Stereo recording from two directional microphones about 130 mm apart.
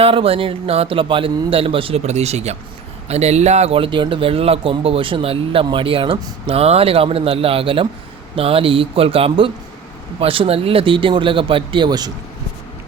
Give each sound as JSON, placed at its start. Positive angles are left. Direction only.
{"t": 0.0, "sound": "speech", "side_deg": -45}
{"t": 2.0, "sound": "speech", "side_deg": -55}